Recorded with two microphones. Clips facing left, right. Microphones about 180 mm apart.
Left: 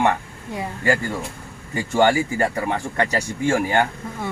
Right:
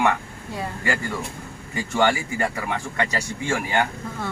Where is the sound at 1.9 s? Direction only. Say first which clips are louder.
Left 4 dB; 40° left (ahead or behind).